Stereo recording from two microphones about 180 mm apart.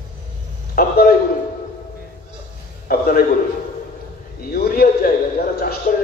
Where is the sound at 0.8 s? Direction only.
60° left (ahead or behind).